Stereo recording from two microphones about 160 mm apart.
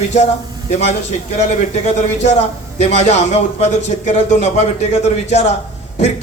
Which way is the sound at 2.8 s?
45° left (ahead or behind).